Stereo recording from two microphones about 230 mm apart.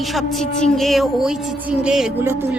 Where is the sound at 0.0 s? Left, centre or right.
Centre.